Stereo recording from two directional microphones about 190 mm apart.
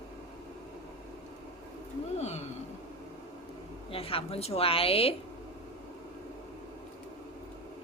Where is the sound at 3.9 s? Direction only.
30° left (ahead or behind).